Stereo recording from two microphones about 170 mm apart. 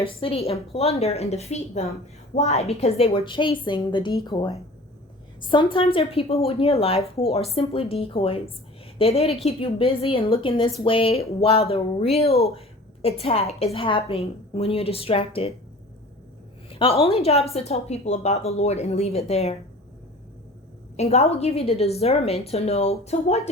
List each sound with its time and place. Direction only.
0.0 s a woman's voice: 35° left (ahead or behind)
16.6 s a woman's voice: 30° left (ahead or behind)
20.9 s a woman's voice: 40° left (ahead or behind)